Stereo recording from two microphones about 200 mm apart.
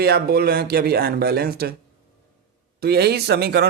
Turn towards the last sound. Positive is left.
turn(degrees=-55)  # may be behind; listen again after turning